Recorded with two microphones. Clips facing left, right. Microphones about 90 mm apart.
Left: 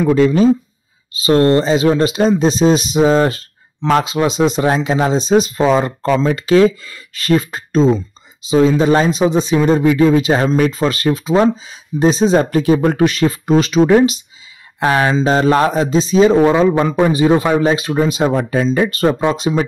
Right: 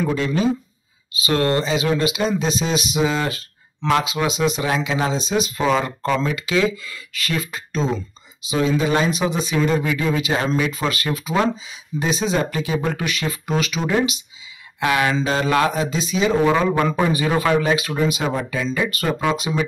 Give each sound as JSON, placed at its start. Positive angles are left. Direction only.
{"t": 0.1, "sound": "speech", "side_deg": 45}
{"t": 16.5, "sound": "a man's voice", "side_deg": 20}